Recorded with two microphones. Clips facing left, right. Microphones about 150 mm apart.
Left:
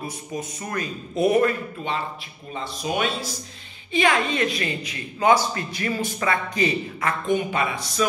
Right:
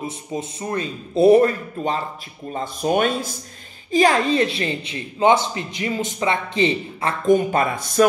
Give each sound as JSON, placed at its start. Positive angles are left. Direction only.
{"t": 0.0, "sound": "speech", "side_deg": -25}
{"t": 2.5, "sound": "speech", "side_deg": -45}
{"t": 3.9, "sound": "speech", "side_deg": -35}
{"t": 7.2, "sound": "speech", "side_deg": -40}